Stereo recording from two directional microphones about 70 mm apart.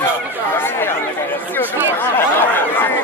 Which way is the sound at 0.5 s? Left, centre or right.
Left.